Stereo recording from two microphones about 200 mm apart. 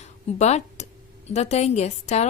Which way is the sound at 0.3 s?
35° left (ahead or behind).